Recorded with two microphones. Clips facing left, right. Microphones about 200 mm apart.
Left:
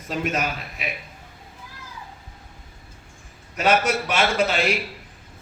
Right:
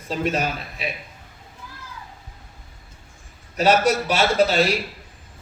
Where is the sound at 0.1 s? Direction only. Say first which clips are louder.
Right 2 dB; 30° right (ahead or behind).